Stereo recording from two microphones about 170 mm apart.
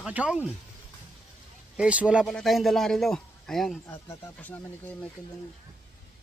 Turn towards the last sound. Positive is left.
turn(degrees=10)  # may be behind; listen again after turning